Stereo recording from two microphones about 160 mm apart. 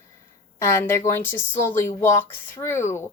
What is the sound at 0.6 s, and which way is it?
A woman's voice, 15° left (ahead or behind).